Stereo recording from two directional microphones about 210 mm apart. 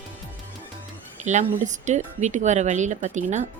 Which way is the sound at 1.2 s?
35° right (ahead or behind).